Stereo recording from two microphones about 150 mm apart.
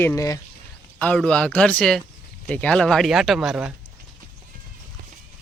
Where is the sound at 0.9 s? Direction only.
5° left (ahead or behind).